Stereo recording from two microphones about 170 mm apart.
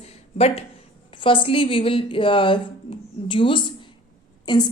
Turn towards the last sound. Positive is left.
turn(degrees=25)  # may be behind; listen again after turning